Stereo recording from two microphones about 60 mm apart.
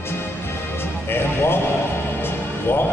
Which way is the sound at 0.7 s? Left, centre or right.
Left.